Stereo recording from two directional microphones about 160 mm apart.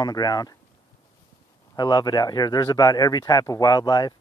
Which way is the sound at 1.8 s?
25° left (ahead or behind).